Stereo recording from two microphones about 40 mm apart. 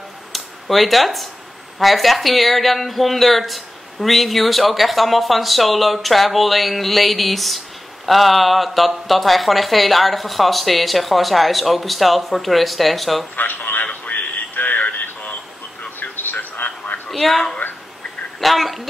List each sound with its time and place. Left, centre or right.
0.3 s speech: centre
14.0 s a sound: left
17.1 s speech: centre